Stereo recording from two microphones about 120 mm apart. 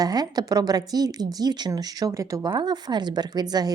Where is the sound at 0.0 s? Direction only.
35° right (ahead or behind).